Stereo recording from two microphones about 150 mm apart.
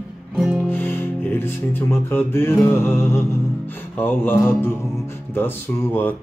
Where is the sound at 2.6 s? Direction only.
15° left (ahead or behind).